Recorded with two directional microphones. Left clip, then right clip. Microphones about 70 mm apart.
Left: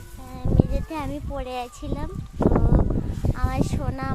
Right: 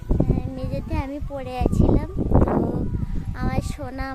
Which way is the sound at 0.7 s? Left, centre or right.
Right.